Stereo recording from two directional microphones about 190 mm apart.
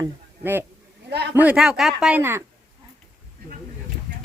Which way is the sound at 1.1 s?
60° right (ahead or behind).